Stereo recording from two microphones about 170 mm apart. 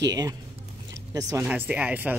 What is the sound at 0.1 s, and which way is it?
Speech, 20° right (ahead or behind).